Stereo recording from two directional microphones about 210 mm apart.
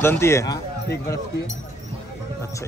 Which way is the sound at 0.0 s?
10° left (ahead or behind).